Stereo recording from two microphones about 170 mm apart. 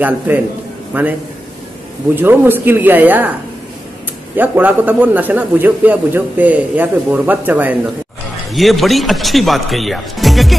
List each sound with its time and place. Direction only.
0.9 s a man's voice: 10° right (ahead or behind)
2.1 s a man's voice: 10° right (ahead or behind)
4.4 s a man's voice: 10° right (ahead or behind)
8.5 s speech: centre (ahead or behind)